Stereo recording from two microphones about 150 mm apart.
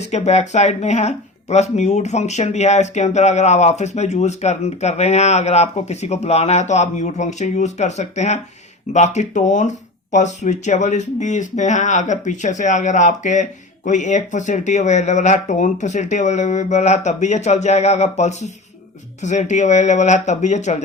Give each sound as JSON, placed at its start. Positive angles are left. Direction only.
{"t": 0.1, "sound": "speech", "side_deg": 45}